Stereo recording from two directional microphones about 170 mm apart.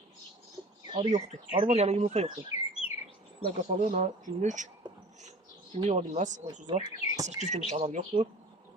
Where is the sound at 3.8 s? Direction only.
50° right (ahead or behind).